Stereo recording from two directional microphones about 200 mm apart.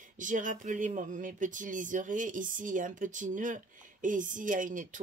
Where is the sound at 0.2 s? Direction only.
40° right (ahead or behind).